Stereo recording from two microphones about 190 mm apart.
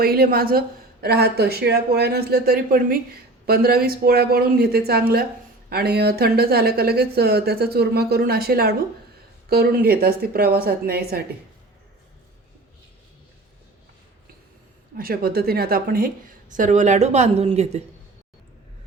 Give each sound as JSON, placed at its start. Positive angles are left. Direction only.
{"t": 0.0, "sound": "a woman's voice", "side_deg": -55}
{"t": 14.9, "sound": "a woman's voice", "side_deg": -50}